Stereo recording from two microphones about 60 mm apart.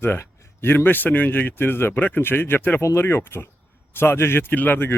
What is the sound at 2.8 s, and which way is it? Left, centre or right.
Speech, left.